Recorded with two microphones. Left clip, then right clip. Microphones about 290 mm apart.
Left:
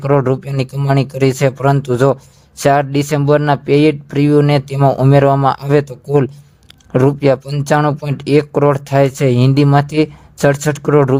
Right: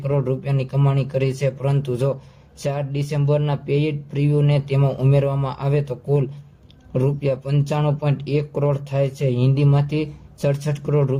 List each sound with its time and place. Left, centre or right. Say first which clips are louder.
0.0 s speech: left 9 dB; left